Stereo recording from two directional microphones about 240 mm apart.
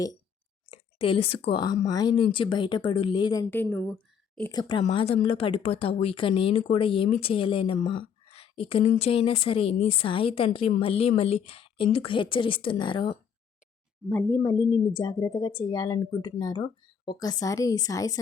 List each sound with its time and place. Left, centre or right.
0.7 s speech: left; by 4.5 s centre
4.5 s speech: left
14.1 s a woman's voice: centre